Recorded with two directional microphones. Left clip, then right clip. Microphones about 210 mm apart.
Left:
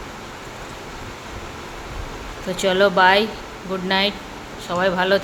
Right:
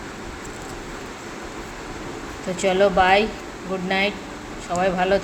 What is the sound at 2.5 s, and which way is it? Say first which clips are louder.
Speech: left 1 dB; 15° left (ahead or behind).